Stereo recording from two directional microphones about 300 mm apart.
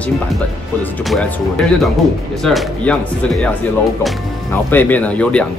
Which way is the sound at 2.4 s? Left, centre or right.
Centre.